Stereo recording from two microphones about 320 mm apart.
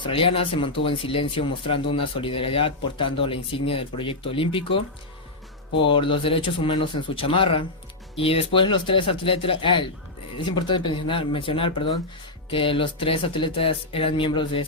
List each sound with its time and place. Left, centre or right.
0.0 s speech: centre
5.9 s speech: centre